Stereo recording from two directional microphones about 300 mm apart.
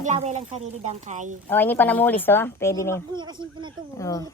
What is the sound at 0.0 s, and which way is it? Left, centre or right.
A woman's voice, right.